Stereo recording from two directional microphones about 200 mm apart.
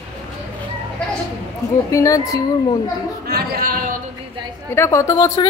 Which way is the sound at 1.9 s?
15° left (ahead or behind).